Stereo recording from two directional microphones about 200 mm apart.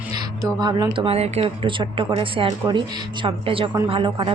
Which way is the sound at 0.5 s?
20° right (ahead or behind).